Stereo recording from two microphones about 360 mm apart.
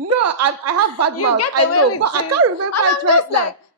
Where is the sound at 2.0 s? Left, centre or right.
Right.